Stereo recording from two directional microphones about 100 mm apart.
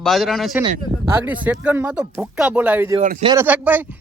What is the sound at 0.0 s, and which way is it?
Speech, centre (ahead or behind).